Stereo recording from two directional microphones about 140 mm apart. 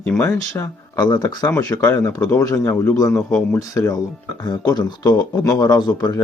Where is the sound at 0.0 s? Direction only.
10° left (ahead or behind).